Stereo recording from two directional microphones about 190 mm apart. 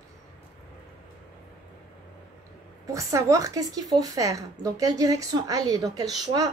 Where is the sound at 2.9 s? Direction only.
15° right (ahead or behind).